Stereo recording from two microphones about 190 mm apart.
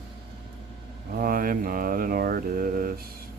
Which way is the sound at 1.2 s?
50° right (ahead or behind).